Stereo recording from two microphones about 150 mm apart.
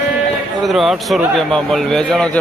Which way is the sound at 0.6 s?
Centre (ahead or behind).